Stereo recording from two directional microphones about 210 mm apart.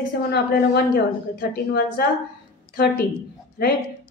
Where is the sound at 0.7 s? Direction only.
45° left (ahead or behind).